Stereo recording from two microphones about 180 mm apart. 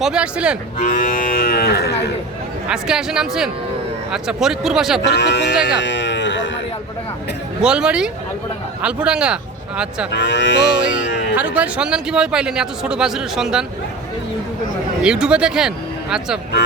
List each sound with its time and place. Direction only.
0.0 s a man's voice: 5° right (ahead or behind)
0.8 s cattle: 45° left (ahead or behind); by 2.1 s 65° left (ahead or behind)
2.6 s a man's voice: 5° right (ahead or behind)
5.0 s speech: 70° left (ahead or behind)
5.6 s a sound: 85° left
7.6 s a man's voice: 5° right (ahead or behind)
10.1 s speech: 75° left (ahead or behind)
11.3 s a man's voice: 10° right (ahead or behind)
15.0 s a man's voice: 5° right (ahead or behind)